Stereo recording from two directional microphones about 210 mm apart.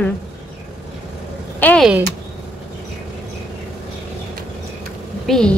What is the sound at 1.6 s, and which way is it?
Speech, 5° left (ahead or behind).